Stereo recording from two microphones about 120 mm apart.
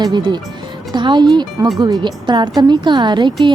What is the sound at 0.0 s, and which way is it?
A woman's voice, 40° right (ahead or behind).